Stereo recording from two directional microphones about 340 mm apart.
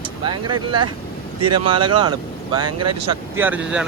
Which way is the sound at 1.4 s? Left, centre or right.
Right.